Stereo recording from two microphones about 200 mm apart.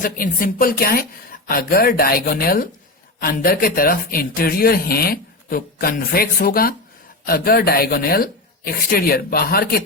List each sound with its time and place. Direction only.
0.0 s speech: 45° left (ahead or behind)